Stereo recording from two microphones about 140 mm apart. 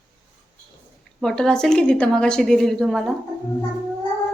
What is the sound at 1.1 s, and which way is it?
A woman's voice, 5° left (ahead or behind).